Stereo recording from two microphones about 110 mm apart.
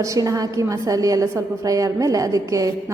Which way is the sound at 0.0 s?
30° right (ahead or behind).